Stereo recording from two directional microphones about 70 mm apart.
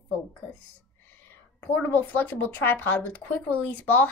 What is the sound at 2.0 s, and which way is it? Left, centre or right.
Speech, left.